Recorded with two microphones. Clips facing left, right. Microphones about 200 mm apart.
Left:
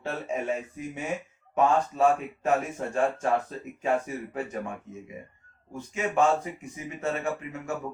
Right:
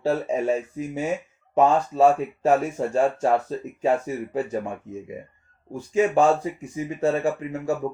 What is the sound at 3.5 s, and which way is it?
Speech, 30° right (ahead or behind).